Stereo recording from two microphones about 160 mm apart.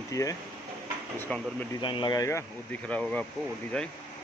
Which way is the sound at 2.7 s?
10° left (ahead or behind).